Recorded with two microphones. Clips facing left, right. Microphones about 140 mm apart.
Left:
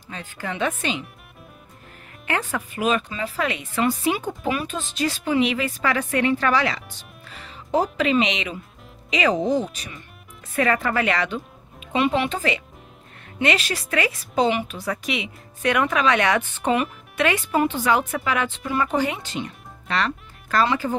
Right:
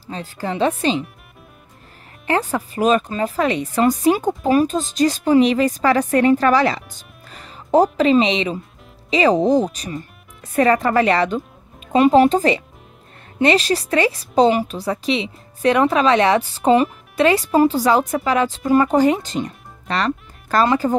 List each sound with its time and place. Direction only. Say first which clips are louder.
0.0 s a woman's voice: right 6 dB; 35° right (ahead or behind)
2.2 s a woman's voice: right 6 dB; 35° right (ahead or behind)